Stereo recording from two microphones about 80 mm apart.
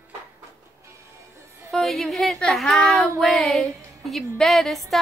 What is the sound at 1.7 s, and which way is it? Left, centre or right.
Speech, centre.